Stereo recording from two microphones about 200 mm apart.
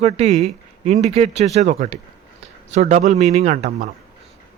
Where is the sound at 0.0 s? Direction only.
35° right (ahead or behind).